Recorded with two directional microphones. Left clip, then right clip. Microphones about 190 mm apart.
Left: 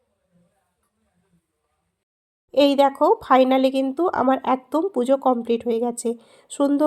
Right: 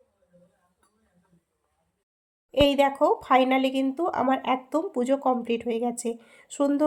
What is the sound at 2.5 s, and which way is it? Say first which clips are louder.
Speech: left 4 dB; 30° left (ahead or behind).